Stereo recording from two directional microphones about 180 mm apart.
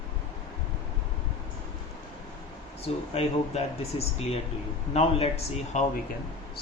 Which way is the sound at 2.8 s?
35° left (ahead or behind).